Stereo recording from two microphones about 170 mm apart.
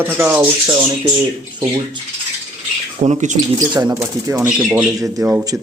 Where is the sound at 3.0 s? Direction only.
40° right (ahead or behind).